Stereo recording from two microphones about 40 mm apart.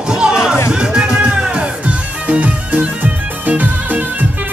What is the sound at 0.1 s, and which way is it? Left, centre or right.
Music, centre.